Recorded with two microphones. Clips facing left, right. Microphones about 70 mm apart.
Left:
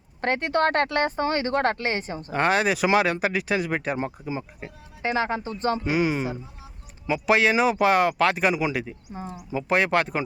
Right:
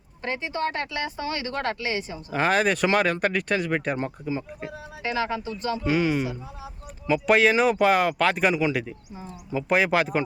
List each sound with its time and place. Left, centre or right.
0.2 s speech: left
2.3 s speech: centre
5.0 s speech: left
5.8 s speech: centre
7.1 s speech: centre
9.1 s speech: left
9.5 s speech: centre